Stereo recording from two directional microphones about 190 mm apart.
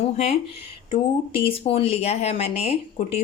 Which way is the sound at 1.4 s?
30° left (ahead or behind).